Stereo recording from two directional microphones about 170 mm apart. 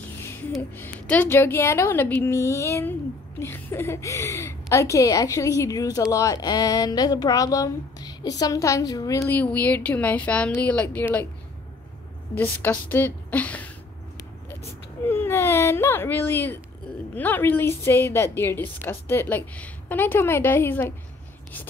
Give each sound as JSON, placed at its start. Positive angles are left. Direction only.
{"t": 0.2, "sound": "a sound", "side_deg": 15}
{"t": 0.5, "sound": "a woman's voice", "side_deg": 10}
{"t": 12.4, "sound": "a woman's voice", "side_deg": 10}
{"t": 15.0, "sound": "a woman's voice", "side_deg": 15}